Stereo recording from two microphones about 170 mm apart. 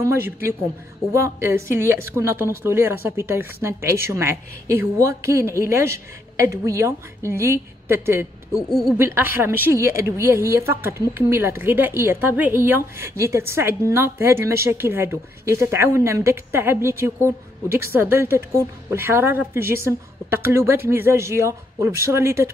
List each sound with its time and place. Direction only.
0.0 s a woman's voice: 15° right (ahead or behind)
8.6 s a woman's voice: 5° left (ahead or behind)
8.9 s a woman's voice: 15° right (ahead or behind)